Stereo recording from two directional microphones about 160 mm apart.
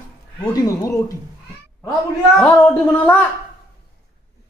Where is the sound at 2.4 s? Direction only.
10° left (ahead or behind).